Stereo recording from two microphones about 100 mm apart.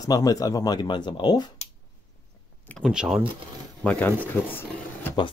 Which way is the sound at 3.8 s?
10° left (ahead or behind).